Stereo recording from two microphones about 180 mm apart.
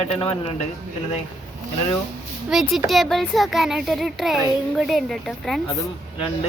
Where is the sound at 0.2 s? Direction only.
30° left (ahead or behind).